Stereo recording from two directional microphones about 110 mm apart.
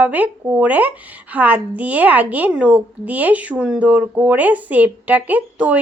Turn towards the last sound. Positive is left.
turn(degrees=-15)  # may be behind; listen again after turning